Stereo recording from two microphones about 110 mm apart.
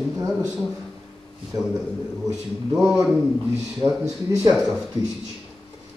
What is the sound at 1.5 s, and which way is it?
Speech, 35° right (ahead or behind).